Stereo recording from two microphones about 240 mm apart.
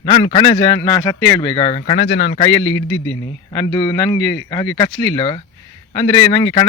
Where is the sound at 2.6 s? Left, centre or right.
Left.